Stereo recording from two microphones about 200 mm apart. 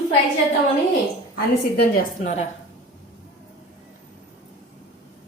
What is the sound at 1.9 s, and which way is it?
Speech, 35° left (ahead or behind).